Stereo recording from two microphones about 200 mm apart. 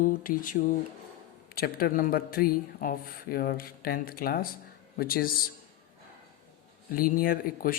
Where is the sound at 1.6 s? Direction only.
50° left (ahead or behind).